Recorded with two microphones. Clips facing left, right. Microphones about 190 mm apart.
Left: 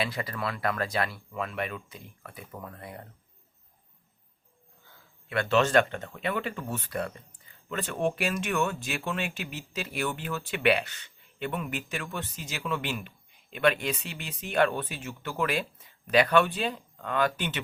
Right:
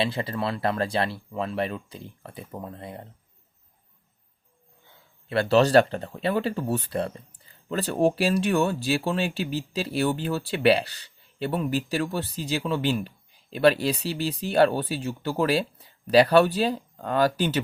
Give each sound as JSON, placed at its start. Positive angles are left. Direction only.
{"t": 0.0, "sound": "speech", "side_deg": -25}
{"t": 4.9, "sound": "speech", "side_deg": -30}